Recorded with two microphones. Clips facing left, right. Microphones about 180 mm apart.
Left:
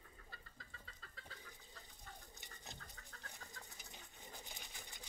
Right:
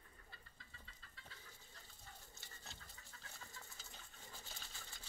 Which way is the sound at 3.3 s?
15° left (ahead or behind).